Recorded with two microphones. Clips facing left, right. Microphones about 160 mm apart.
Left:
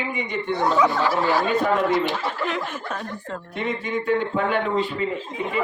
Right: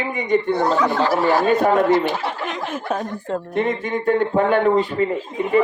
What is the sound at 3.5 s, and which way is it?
A man's voice, 45° right (ahead or behind).